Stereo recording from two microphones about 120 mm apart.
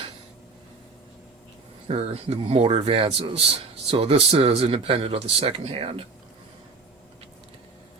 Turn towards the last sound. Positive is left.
turn(degrees=-50)  # may be behind; listen again after turning